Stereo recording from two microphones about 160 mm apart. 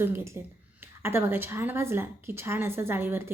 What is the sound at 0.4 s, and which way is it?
A woman's voice, 15° right (ahead or behind).